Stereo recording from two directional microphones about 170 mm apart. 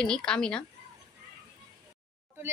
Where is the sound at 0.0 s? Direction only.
5° left (ahead or behind).